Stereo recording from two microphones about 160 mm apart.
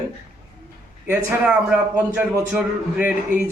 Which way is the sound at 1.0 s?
15° right (ahead or behind).